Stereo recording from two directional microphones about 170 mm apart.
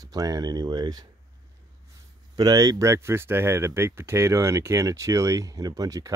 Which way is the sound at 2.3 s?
20° right (ahead or behind).